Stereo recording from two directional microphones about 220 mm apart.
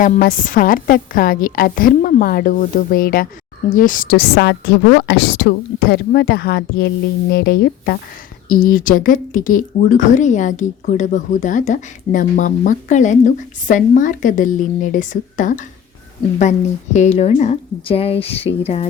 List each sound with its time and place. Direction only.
0.0 s a woman's voice: 40° left (ahead or behind)